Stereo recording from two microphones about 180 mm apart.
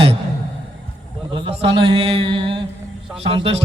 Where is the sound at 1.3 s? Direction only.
25° right (ahead or behind).